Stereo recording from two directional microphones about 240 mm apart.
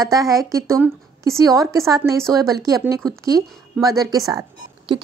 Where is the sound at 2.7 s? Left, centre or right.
Centre.